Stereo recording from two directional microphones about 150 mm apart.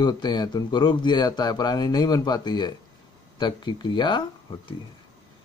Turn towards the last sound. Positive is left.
turn(degrees=30)  # may be behind; listen again after turning